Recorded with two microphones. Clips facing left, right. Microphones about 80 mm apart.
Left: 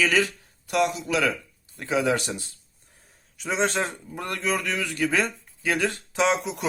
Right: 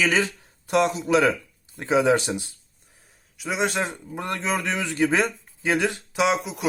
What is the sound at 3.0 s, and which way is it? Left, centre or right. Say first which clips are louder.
A man's voice: right 1 dB; centre.